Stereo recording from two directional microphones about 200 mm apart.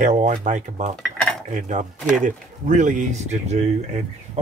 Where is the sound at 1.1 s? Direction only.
Centre (ahead or behind).